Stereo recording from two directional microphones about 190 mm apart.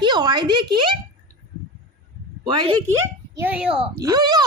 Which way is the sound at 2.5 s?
20° right (ahead or behind).